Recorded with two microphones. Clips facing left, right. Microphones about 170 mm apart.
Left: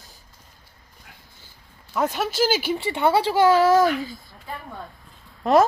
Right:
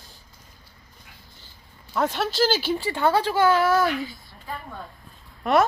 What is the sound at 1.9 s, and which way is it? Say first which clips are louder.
Speech: left 1 dB; 5° left (ahead or behind).